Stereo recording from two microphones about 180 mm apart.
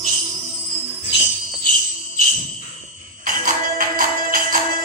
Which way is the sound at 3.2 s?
50° right (ahead or behind).